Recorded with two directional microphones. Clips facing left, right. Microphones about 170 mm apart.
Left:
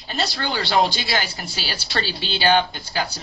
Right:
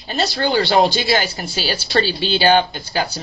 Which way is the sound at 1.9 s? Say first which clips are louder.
Right 8 dB; 35° right (ahead or behind).